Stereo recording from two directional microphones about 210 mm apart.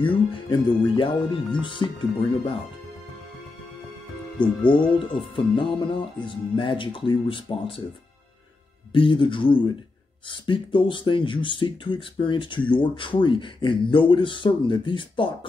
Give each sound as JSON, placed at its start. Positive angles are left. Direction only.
{"t": 0.3, "sound": "speech", "side_deg": 25}
{"t": 4.4, "sound": "speech", "side_deg": 25}
{"t": 8.9, "sound": "speech", "side_deg": 25}